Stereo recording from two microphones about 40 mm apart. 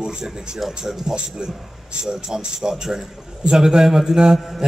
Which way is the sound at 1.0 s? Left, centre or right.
Centre.